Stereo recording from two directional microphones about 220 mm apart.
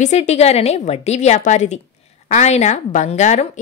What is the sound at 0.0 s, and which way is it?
A woman's voice, 30° left (ahead or behind).